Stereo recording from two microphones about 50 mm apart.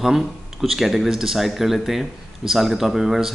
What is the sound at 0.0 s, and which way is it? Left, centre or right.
Speech, centre.